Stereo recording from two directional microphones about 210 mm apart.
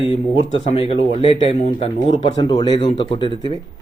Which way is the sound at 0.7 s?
25° left (ahead or behind).